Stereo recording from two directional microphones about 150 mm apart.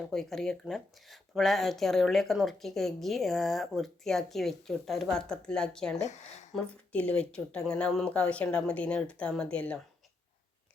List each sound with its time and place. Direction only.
0.1 s speech: 5° left (ahead or behind)
6.0 s speech: 50° left (ahead or behind)
6.5 s speech: 10° left (ahead or behind)